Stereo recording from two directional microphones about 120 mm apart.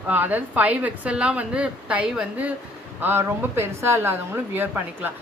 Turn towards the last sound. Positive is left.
turn(degrees=-15)  # may be behind; listen again after turning